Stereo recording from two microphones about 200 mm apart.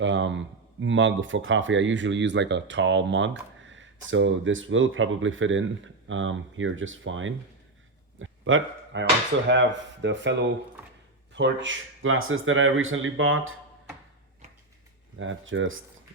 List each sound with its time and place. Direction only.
0.0 s speech: 65° right (ahead or behind)
8.2 s a sound: 75° right (ahead or behind)
9.5 s speech: 65° right (ahead or behind)
11.3 s speech: 65° right (ahead or behind); by 13.6 s 90° right
15.2 s speech: 75° right (ahead or behind)